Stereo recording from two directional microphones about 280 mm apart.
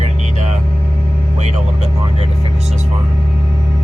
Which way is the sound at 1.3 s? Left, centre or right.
Right.